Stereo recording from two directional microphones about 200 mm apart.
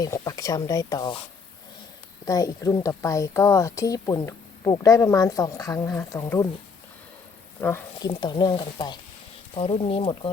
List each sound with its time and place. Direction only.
0.0 s speech: 15° left (ahead or behind)
2.2 s speech: 15° left (ahead or behind)
7.6 s speech: 15° left (ahead or behind)